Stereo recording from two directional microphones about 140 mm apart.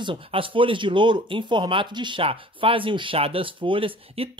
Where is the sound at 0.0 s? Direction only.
40° right (ahead or behind).